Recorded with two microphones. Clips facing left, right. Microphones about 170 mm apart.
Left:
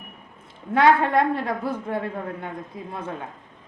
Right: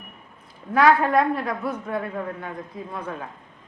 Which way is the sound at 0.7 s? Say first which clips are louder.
Even; 25° left (ahead or behind).